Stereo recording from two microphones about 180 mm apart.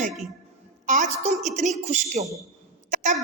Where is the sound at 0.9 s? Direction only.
45° right (ahead or behind).